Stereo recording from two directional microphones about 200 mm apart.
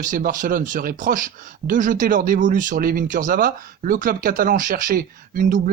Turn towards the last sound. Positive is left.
turn(degrees=-45)  # may be behind; listen again after turning